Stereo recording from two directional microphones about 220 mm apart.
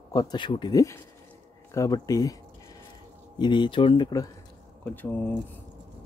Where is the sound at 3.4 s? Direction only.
20° left (ahead or behind).